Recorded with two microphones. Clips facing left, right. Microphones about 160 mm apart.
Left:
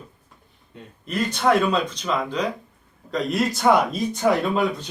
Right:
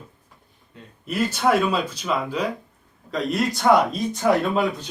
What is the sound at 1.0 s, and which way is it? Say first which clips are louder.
Speech: even; 5° right (ahead or behind).